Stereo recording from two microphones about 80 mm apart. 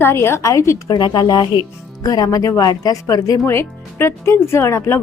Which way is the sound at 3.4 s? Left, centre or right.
Left.